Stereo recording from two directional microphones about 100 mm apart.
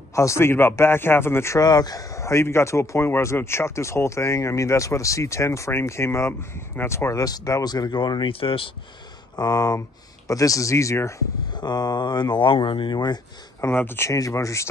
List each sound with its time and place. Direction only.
0.1 s a man's voice: 30° left (ahead or behind)
1.6 s a man's voice: 40° left (ahead or behind); by 8.6 s 65° left (ahead or behind)
9.4 s speech: 40° left (ahead or behind)
11.6 s speech: 45° left (ahead or behind)
13.6 s a man's voice: 20° left (ahead or behind)
14.1 s speech: 35° left (ahead or behind)